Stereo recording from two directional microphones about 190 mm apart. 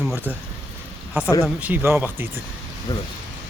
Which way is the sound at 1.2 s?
10° right (ahead or behind).